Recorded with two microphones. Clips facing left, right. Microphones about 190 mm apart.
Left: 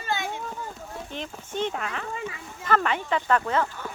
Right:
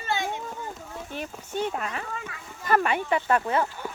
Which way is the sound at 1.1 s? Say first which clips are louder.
Right 2 dB; 10° right (ahead or behind).